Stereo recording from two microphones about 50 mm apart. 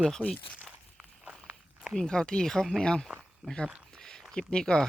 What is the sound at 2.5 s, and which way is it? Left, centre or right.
Speech, centre.